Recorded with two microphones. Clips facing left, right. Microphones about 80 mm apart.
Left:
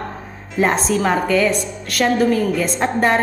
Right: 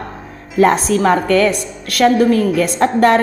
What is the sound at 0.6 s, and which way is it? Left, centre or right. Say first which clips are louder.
A woman's voice: right 5 dB; right.